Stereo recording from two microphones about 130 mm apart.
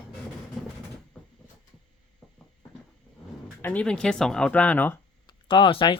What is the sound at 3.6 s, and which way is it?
Speech, 10° left (ahead or behind).